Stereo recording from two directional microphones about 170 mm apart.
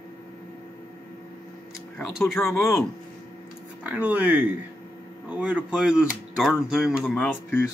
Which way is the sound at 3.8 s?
10° right (ahead or behind).